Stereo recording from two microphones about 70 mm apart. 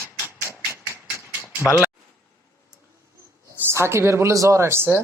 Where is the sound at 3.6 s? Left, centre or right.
Right.